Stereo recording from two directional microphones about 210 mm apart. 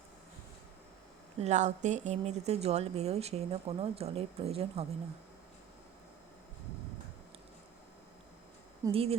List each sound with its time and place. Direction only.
1.4 s speech: 35° right (ahead or behind)
8.9 s speech: 30° right (ahead or behind)